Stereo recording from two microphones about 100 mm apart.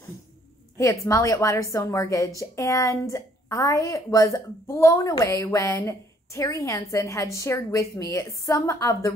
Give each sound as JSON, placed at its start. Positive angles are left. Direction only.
{"t": 0.7, "sound": "a woman's voice", "side_deg": 30}